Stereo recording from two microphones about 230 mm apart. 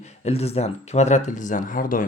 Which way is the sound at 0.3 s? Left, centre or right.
Left.